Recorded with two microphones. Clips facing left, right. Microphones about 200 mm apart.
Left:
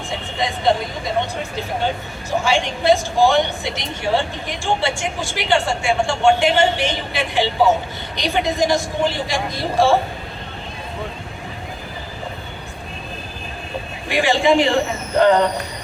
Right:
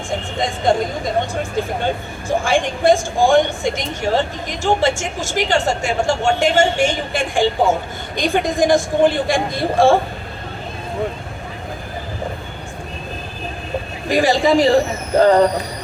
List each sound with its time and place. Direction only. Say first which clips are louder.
0.1 s speech: right 3 dB; 50° right (ahead or behind)
14.1 s a man's voice: right 2 dB; 40° right (ahead or behind)